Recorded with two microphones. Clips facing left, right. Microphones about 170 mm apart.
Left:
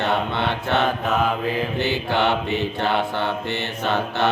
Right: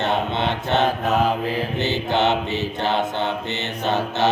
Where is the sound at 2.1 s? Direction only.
20° right (ahead or behind).